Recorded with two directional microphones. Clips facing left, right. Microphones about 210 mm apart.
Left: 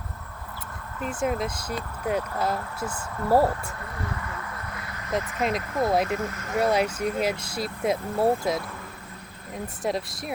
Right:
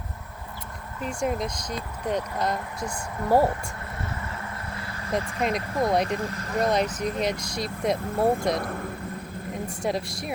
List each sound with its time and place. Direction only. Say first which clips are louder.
1.0 s speech: left 1 dB; centre (ahead or behind)
4.7 s vehicle: right 2 dB; 30° right (ahead or behind)
5.1 s speech: even; centre (ahead or behind)
6.1 s speech: even; 35° right (ahead or behind)
6.6 s speech: left 1 dB; 10° left (ahead or behind)
9.5 s speech: even; centre (ahead or behind)